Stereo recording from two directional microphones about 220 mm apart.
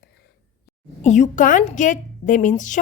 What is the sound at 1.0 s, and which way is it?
A woman's voice, 35° left (ahead or behind).